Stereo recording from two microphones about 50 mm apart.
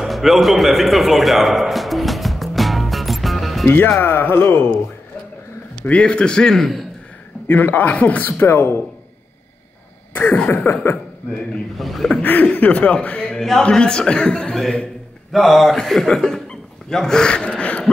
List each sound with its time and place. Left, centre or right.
0.0 s music: centre
3.6 s a man's voice: left
5.8 s a man's voice: left
6.5 s speech: centre
7.4 s a man's voice: left
10.1 s a man's voice: left
11.7 s speech: centre
12.2 s a man's voice: left; by 14.6 s centre
15.3 s speech: centre
16.4 s dog: centre
17.6 s a sound: left